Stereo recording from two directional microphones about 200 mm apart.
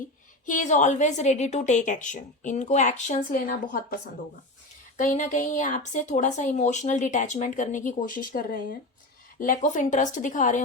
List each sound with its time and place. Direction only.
0.4 s speech: 40° left (ahead or behind)
4.9 s speech: 40° left (ahead or behind)